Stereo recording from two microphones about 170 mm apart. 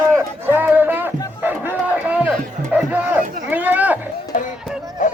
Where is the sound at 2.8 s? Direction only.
10° right (ahead or behind).